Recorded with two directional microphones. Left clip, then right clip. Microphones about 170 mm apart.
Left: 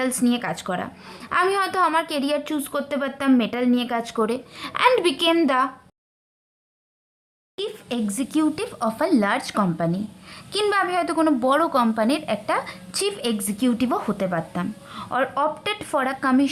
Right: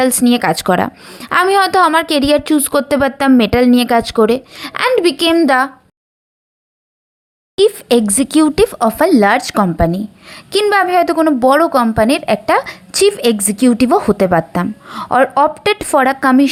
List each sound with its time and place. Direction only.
0.0 s speech: 40° right (ahead or behind)
0.9 s a woman's voice: 30° right (ahead or behind)
1.2 s a woman's voice: 45° right (ahead or behind)
7.5 s a woman's voice: 45° right (ahead or behind)